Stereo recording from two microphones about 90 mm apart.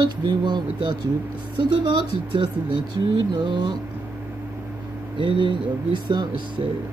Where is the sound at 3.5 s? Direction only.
60° right (ahead or behind).